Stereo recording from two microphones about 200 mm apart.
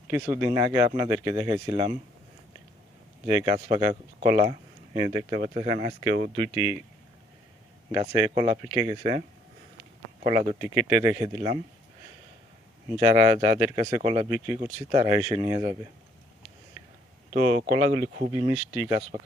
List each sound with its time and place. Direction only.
0.1 s speech: 10° right (ahead or behind)
3.2 s speech: 20° right (ahead or behind)
7.9 s speech: 20° right (ahead or behind)
10.2 s speech: 25° right (ahead or behind)
13.0 s speech: 20° right (ahead or behind)
17.3 s speech: 25° right (ahead or behind)